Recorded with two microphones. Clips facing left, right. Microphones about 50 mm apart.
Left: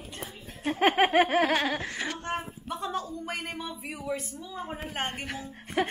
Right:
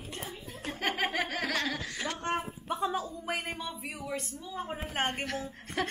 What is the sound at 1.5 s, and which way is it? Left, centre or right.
Speech, left.